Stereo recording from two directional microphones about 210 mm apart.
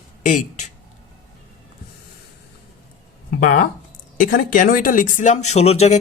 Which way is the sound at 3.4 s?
40° left (ahead or behind).